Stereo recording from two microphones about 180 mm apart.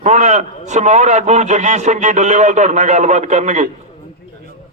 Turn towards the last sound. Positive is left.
turn(degrees=-40)  # may be behind; listen again after turning